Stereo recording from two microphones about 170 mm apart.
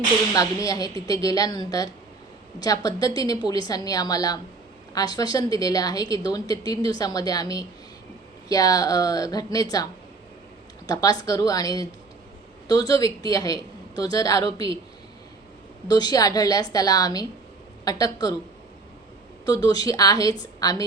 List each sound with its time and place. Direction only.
0.3 s a woman's voice: 20° left (ahead or behind)
15.9 s a woman's voice: 25° left (ahead or behind)
19.5 s a woman's voice: 20° left (ahead or behind)